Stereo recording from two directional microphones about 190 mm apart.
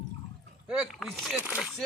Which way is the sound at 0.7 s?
Centre (ahead or behind).